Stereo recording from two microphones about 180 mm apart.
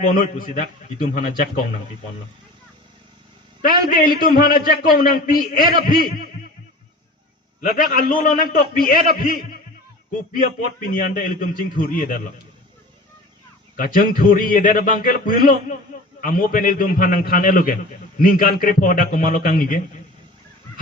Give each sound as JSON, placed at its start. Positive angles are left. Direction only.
{"t": 0.0, "sound": "a man's voice", "side_deg": 50}
{"t": 3.6, "sound": "a man's voice", "side_deg": 50}
{"t": 7.8, "sound": "a man's voice", "side_deg": 50}
{"t": 10.9, "sound": "a man's voice", "side_deg": 50}
{"t": 13.7, "sound": "a man's voice", "side_deg": 50}